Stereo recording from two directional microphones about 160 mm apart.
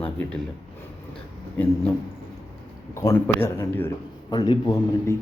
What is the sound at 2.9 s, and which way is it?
Speech, 20° left (ahead or behind).